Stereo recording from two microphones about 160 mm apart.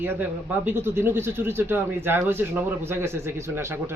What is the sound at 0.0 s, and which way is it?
Speech, 10° right (ahead or behind).